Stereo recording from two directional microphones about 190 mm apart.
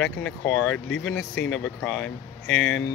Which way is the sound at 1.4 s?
80° left.